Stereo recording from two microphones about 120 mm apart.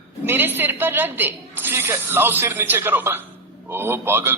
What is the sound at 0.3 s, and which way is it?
A man's voice, 15° right (ahead or behind).